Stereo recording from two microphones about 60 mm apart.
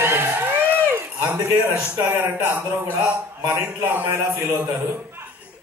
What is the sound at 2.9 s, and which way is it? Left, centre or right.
A man's voice, right.